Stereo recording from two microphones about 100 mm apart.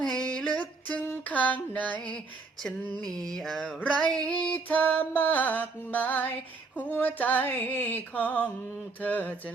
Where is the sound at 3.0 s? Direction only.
5° left (ahead or behind).